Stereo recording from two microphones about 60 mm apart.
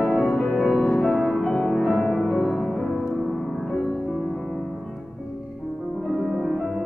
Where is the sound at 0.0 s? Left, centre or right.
Centre.